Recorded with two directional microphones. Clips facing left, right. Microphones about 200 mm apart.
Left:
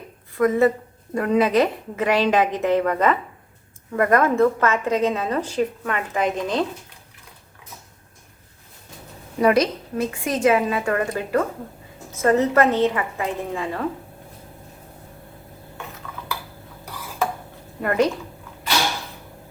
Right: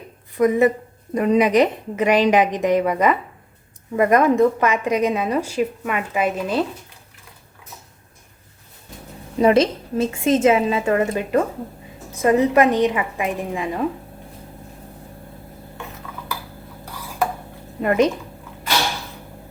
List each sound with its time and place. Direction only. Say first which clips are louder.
0.3 s a woman's voice: right 2 dB; 15° right (ahead or behind)
9.4 s a woman's voice: right 2 dB; 25° right (ahead or behind)
17.8 s a woman's voice: right 3 dB; 20° right (ahead or behind)